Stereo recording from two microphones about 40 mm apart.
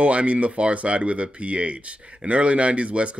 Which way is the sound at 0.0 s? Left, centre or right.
Right.